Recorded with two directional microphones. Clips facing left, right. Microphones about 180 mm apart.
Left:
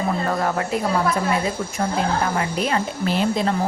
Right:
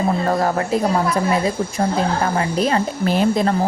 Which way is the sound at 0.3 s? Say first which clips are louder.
Right 4 dB; 40° right (ahead or behind).